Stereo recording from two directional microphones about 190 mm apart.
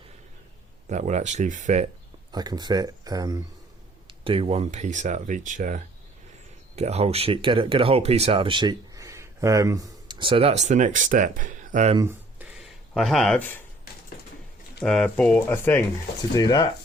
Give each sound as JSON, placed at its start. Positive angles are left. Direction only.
{"t": 0.9, "sound": "speech", "side_deg": -40}
{"t": 2.3, "sound": "speech", "side_deg": -20}
{"t": 4.2, "sound": "speech", "side_deg": -30}
{"t": 11.9, "sound": "a sound", "side_deg": -15}
{"t": 12.5, "sound": "a sound", "side_deg": 0}
{"t": 14.8, "sound": "speech", "side_deg": 5}